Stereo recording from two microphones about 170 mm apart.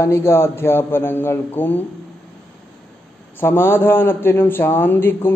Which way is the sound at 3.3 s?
15° left (ahead or behind).